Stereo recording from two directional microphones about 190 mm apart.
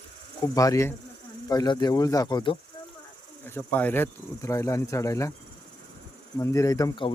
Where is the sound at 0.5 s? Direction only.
15° left (ahead or behind).